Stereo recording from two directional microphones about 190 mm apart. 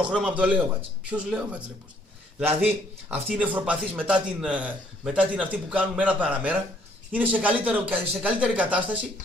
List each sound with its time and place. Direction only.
0.0 s a man's voice: 5° right (ahead or behind)